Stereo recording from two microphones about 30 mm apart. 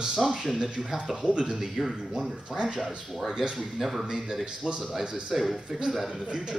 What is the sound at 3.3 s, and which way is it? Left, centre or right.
Speech, centre.